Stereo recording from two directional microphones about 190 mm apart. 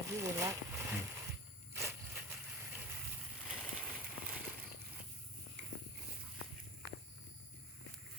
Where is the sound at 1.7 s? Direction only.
10° right (ahead or behind).